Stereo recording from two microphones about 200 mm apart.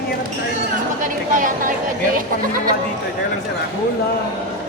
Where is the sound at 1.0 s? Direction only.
40° right (ahead or behind).